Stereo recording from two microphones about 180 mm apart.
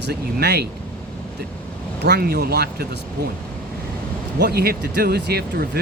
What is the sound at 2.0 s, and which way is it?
Speech, 65° right (ahead or behind).